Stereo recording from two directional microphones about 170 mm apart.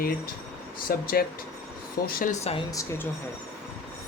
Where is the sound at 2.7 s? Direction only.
15° left (ahead or behind).